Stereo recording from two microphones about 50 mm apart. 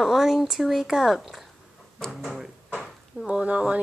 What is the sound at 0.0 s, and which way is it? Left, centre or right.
Speech, centre.